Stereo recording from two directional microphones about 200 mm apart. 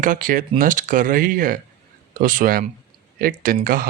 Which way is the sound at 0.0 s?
40° right (ahead or behind).